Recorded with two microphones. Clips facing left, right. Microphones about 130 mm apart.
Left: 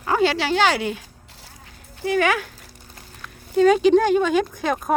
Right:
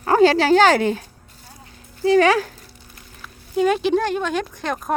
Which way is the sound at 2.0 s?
30° right (ahead or behind).